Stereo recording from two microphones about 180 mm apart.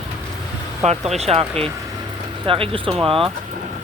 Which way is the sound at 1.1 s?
35° right (ahead or behind).